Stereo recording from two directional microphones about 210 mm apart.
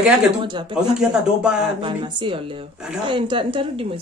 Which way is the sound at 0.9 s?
5° right (ahead or behind).